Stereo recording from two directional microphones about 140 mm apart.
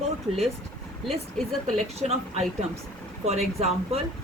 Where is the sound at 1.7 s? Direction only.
50° right (ahead or behind).